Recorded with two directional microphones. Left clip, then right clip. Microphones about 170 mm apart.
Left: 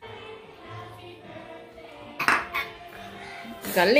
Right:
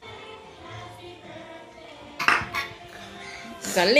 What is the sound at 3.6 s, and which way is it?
Music, centre (ahead or behind).